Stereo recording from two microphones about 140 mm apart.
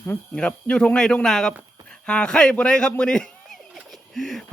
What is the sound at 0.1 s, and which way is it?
A man's voice, 5° left (ahead or behind).